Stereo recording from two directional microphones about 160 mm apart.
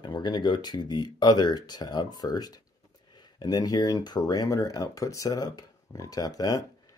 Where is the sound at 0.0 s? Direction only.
25° left (ahead or behind).